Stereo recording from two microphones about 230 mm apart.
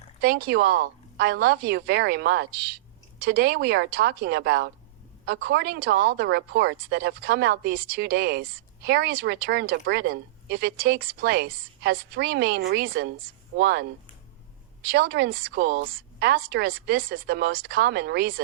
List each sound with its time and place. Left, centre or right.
0.2 s speech: right
14.8 s speech: right